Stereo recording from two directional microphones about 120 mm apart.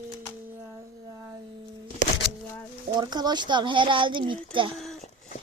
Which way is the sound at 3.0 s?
35° right (ahead or behind).